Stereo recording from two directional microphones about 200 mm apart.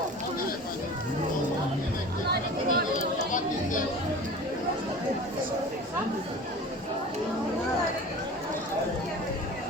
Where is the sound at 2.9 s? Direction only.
40° left (ahead or behind).